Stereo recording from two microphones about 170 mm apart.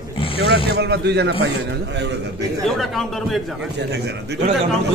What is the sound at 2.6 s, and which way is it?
Speech, centre (ahead or behind).